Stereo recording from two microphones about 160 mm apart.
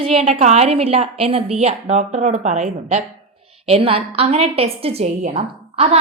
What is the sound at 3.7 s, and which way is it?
A woman's voice, 35° right (ahead or behind).